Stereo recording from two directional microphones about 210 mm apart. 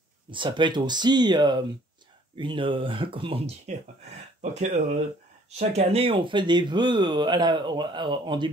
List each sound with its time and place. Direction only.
0.3 s speech: 25° right (ahead or behind)